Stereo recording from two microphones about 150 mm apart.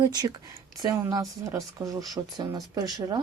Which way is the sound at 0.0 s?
25° right (ahead or behind).